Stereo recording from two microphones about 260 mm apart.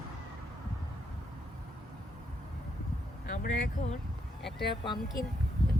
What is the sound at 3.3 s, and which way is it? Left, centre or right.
Speech, left.